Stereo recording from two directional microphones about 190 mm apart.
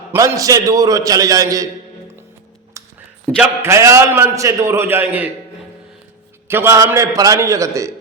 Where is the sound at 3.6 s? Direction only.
15° right (ahead or behind).